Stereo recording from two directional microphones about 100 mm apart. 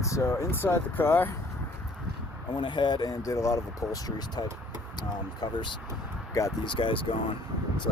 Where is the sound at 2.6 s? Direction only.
50° left (ahead or behind).